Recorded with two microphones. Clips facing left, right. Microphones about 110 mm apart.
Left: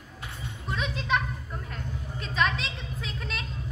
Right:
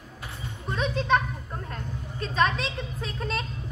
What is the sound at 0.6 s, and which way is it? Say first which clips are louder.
Children playing: right 5 dB; 40° right (ahead or behind).